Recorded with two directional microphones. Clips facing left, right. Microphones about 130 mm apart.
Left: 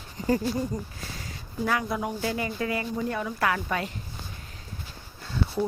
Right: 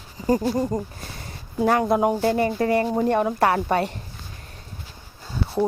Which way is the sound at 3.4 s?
35° right (ahead or behind).